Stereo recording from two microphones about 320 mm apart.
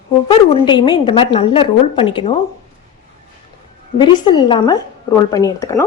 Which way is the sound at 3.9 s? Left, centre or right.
Centre.